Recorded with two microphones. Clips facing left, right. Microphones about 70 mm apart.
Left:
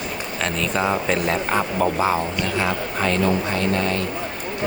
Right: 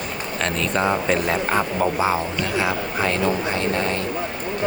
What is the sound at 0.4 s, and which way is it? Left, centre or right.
Speech, centre.